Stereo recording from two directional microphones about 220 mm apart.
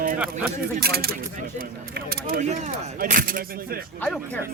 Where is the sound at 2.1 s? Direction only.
40° right (ahead or behind).